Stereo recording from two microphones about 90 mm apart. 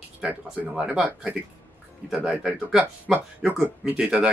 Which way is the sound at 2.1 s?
5° right (ahead or behind).